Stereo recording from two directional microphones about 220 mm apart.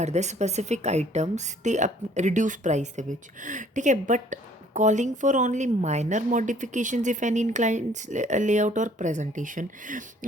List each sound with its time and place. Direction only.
0.0 s a woman's voice: 30° right (ahead or behind)